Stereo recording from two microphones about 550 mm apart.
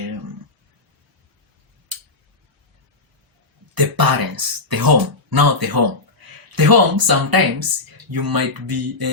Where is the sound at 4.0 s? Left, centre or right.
Right.